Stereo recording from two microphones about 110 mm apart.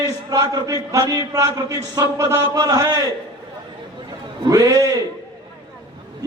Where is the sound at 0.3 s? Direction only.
35° right (ahead or behind).